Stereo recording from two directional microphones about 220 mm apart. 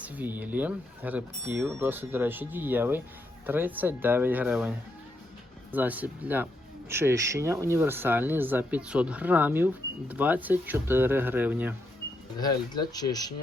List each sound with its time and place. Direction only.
0.0 s speech: 5° right (ahead or behind)
5.7 s speech: 5° right (ahead or behind)
12.4 s speech: 20° left (ahead or behind)